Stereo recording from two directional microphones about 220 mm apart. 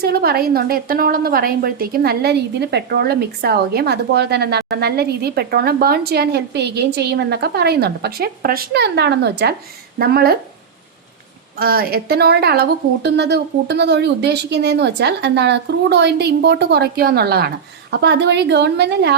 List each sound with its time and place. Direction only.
0.0 s a woman's voice: 45° right (ahead or behind)
11.5 s a woman's voice: 45° right (ahead or behind)